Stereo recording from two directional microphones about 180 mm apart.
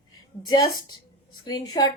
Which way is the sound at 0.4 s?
25° left (ahead or behind).